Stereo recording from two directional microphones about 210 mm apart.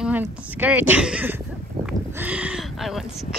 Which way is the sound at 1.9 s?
5° right (ahead or behind).